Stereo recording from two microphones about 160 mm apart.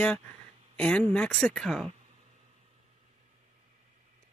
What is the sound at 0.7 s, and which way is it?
Speech, 5° left (ahead or behind).